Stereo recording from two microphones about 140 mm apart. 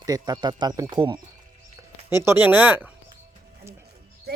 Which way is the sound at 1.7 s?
20° right (ahead or behind).